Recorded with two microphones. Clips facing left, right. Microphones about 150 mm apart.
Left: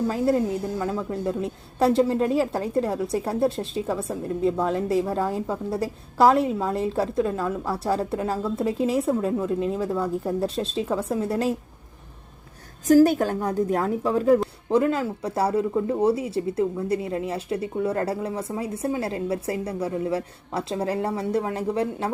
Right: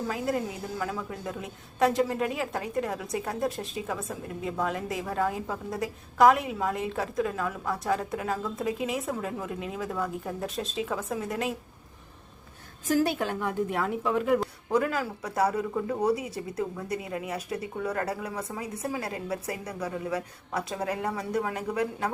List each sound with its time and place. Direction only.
0.8 s a woman's voice: 25° left (ahead or behind)
12.9 s a woman's voice: 40° left (ahead or behind)